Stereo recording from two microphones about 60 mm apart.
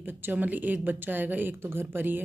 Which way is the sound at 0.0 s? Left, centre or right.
Right.